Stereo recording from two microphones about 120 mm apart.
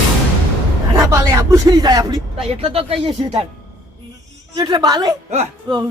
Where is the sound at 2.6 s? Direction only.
55° right (ahead or behind).